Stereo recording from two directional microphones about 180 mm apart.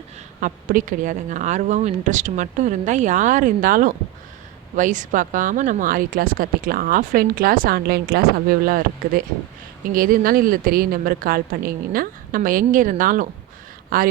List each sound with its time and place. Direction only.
0.3 s speech: 45° right (ahead or behind)